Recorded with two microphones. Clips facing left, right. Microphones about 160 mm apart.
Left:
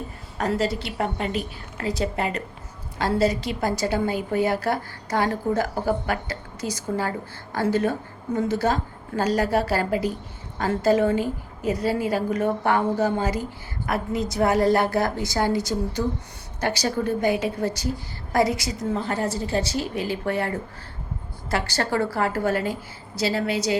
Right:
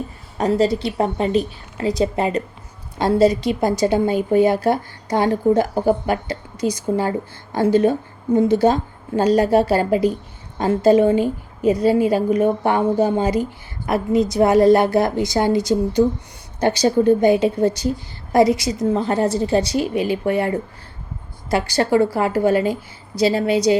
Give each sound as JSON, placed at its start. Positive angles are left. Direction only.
{"t": 0.3, "sound": "a woman's voice", "side_deg": -20}